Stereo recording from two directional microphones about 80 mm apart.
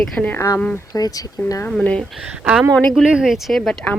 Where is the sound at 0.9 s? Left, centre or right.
Left.